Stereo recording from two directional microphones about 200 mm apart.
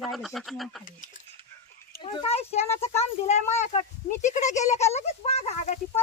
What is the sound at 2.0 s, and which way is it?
Speech, 25° left (ahead or behind).